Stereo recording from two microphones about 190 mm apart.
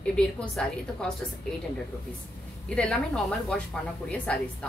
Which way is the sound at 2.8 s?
5° left (ahead or behind).